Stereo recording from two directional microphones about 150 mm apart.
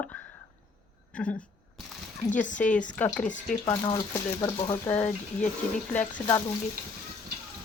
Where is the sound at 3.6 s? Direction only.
20° left (ahead or behind).